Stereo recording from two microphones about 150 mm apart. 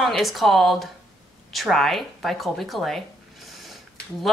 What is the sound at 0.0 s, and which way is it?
A woman's voice, centre (ahead or behind).